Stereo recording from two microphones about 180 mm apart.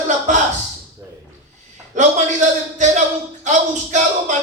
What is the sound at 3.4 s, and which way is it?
Speech, 40° right (ahead or behind).